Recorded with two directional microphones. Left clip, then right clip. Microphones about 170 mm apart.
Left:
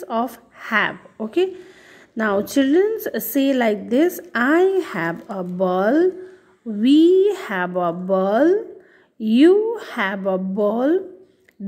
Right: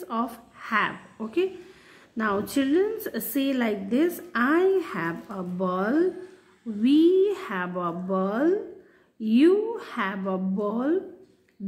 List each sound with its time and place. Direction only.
0.0 s a woman's voice: 45° left (ahead or behind)